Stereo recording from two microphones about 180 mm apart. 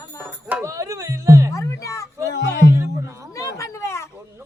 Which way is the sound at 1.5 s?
15° left (ahead or behind).